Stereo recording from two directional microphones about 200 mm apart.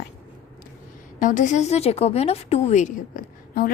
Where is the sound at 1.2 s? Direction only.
40° left (ahead or behind).